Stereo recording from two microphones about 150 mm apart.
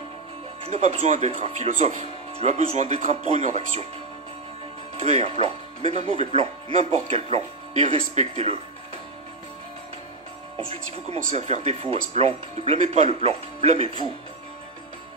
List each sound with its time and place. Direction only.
0.7 s speech: 45° right (ahead or behind)
5.0 s speech: 45° right (ahead or behind)
10.7 s speech: 45° right (ahead or behind)